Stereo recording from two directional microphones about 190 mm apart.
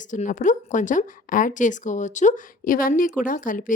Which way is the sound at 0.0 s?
40° left (ahead or behind).